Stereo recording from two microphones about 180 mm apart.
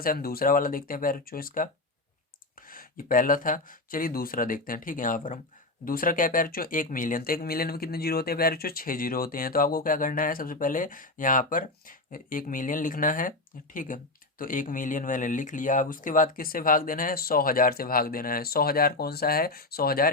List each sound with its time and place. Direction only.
0.0 s speech: 55° left (ahead or behind)